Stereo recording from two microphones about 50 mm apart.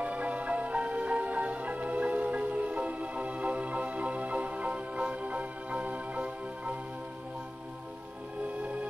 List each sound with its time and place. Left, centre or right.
0.0 s music: right